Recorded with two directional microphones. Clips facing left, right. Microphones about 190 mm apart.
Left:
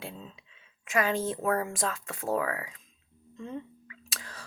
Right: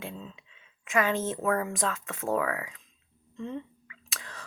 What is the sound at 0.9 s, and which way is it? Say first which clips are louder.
Speech: right 1 dB; 40° left (ahead or behind).